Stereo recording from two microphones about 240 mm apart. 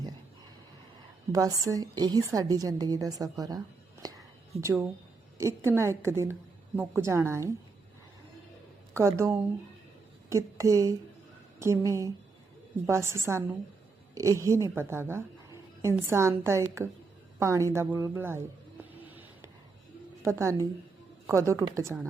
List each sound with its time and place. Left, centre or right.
1.3 s a woman's voice: centre
4.6 s a woman's voice: centre
8.9 s a woman's voice: centre
20.2 s a woman's voice: centre